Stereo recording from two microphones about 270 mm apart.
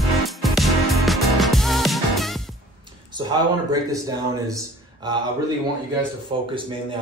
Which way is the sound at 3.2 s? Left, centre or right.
Centre.